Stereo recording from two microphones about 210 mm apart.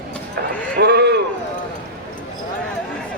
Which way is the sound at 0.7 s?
50° right (ahead or behind).